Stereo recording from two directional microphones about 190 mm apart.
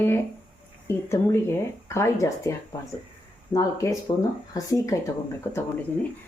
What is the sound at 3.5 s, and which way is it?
Speech, 15° left (ahead or behind).